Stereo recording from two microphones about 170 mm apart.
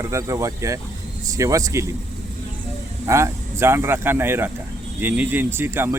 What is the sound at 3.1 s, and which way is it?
Speech, 15° right (ahead or behind).